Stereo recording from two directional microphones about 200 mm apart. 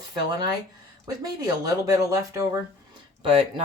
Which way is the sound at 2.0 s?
15° right (ahead or behind).